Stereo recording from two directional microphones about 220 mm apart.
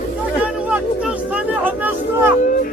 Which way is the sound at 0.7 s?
5° right (ahead or behind).